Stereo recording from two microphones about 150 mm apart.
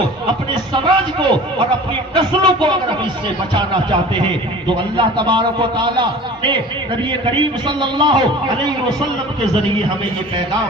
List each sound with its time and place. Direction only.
0.5 s a man's voice: 30° right (ahead or behind)
4.9 s a man's voice: 30° right (ahead or behind)
7.8 s a man's voice: 30° right (ahead or behind)